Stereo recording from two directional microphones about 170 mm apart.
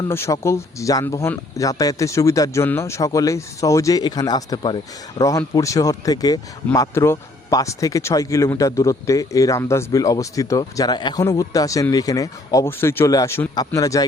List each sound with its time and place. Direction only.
0.1 s speech: 15° left (ahead or behind)